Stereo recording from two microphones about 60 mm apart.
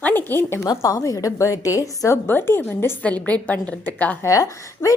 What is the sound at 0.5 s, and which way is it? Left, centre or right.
A woman's voice, left.